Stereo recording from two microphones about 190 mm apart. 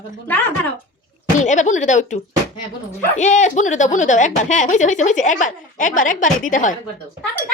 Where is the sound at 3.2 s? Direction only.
40° left (ahead or behind).